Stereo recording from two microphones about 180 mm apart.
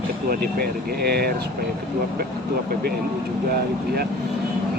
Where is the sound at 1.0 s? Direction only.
65° right (ahead or behind).